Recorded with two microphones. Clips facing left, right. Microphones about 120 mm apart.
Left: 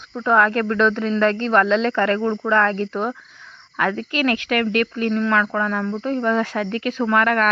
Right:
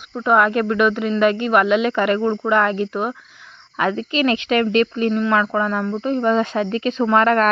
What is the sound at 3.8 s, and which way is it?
Speech, 20° right (ahead or behind).